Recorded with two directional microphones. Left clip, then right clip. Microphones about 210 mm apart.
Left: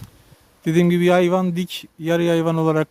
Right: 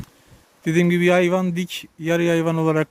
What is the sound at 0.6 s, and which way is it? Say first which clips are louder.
Speech: left 1 dB; 10° left (ahead or behind).